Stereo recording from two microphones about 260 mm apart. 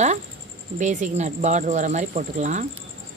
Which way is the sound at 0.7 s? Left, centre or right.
Right.